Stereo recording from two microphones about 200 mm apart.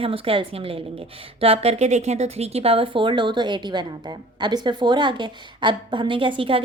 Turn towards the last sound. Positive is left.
turn(degrees=-25)  # may be behind; listen again after turning